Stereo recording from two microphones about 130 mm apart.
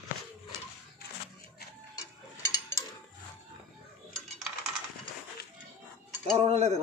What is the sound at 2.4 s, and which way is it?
Mechanisms, 25° left (ahead or behind).